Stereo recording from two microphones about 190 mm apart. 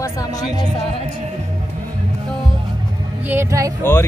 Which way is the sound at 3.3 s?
15° right (ahead or behind).